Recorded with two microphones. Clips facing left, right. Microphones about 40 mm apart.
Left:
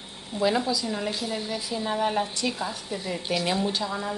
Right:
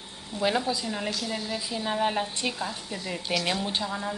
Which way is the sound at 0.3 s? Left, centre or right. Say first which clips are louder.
Left 3 dB; left.